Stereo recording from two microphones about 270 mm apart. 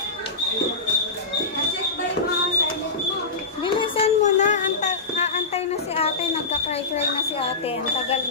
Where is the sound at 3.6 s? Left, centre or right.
Centre.